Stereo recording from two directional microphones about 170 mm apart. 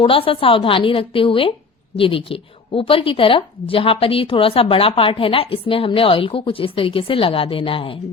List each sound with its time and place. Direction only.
0.0 s a woman's voice: 30° left (ahead or behind)